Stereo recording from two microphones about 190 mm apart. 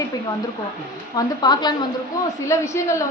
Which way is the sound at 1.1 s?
20° left (ahead or behind).